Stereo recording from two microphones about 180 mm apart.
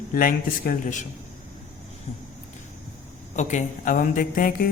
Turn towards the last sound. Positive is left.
turn(degrees=50)  # may be behind; listen again after turning